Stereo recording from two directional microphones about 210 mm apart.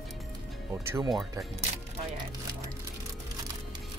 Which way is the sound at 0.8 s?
10° right (ahead or behind).